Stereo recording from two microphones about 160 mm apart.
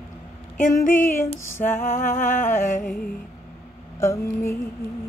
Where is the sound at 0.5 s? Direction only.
60° left (ahead or behind).